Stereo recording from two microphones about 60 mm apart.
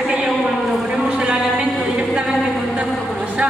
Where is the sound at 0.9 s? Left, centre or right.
Centre.